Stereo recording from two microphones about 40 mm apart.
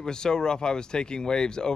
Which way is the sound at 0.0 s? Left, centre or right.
Centre.